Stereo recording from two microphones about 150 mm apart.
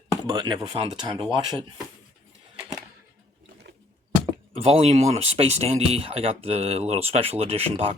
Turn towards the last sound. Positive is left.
turn(degrees=-40)  # may be behind; listen again after turning